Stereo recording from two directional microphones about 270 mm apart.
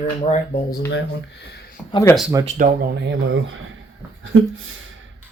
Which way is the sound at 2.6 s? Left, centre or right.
Right.